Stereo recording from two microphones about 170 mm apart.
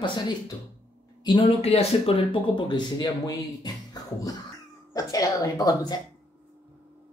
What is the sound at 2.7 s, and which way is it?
A man's voice, 25° left (ahead or behind).